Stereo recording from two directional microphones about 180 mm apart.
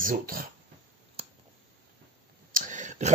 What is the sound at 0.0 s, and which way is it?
Speech, 50° right (ahead or behind).